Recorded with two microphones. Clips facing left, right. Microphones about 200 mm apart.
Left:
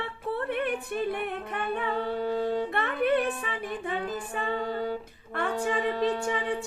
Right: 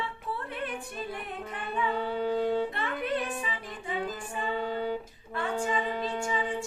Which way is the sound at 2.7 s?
60° left (ahead or behind).